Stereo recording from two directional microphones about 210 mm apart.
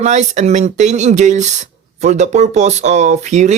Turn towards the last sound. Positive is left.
turn(degrees=-35)  # may be behind; listen again after turning